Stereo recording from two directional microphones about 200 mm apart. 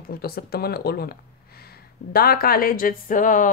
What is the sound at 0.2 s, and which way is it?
Speech, 50° left (ahead or behind).